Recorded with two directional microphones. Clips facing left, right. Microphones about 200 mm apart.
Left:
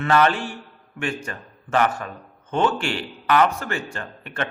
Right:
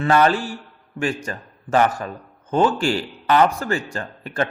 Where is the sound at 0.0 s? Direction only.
35° right (ahead or behind).